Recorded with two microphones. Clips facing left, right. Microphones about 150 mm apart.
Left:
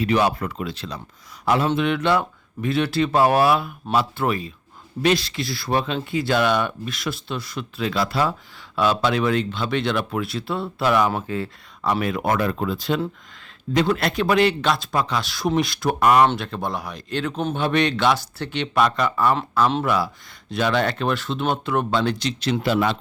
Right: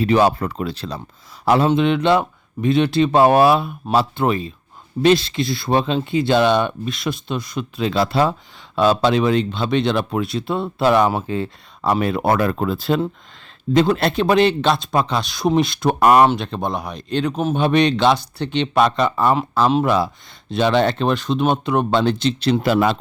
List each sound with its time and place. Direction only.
0.0 s speech: 30° right (ahead or behind)
12.4 s speech: 45° right (ahead or behind)
13.7 s speech: 30° right (ahead or behind)
16.4 s speech: 20° right (ahead or behind)
22.6 s speech: 45° right (ahead or behind)